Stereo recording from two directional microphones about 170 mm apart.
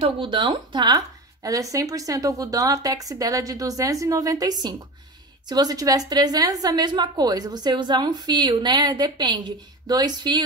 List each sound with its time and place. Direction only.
0.0 s a woman's voice: 30° right (ahead or behind)